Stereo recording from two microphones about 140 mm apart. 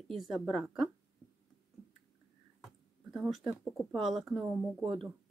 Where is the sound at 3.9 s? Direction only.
Centre (ahead or behind).